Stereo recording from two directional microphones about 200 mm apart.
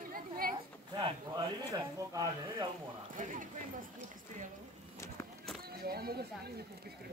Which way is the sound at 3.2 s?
40° right (ahead or behind).